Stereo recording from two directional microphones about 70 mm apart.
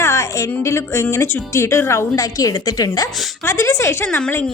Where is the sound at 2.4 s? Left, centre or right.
Left.